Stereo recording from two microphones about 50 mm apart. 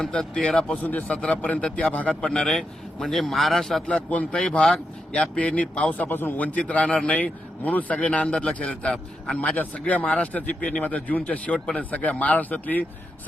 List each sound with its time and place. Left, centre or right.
0.0 s speech: centre
0.8 s a man's voice: left
2.2 s speech: centre
2.6 s speech: centre
3.8 s a man's voice: left
11.9 s speech: left